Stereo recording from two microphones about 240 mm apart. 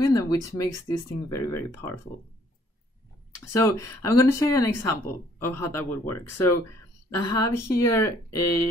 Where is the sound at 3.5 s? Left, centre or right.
Centre.